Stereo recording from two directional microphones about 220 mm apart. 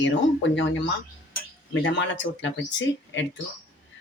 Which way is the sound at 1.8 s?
55° left (ahead or behind).